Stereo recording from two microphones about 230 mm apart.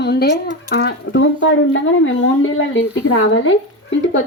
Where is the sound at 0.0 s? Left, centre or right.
Left.